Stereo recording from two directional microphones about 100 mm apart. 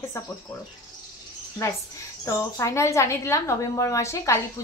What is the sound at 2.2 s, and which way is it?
A woman's voice, 30° left (ahead or behind).